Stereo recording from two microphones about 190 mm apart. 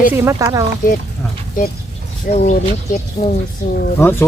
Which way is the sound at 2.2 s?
40° left (ahead or behind).